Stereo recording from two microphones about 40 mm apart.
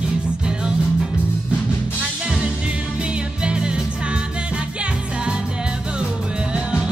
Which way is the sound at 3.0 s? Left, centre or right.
Right.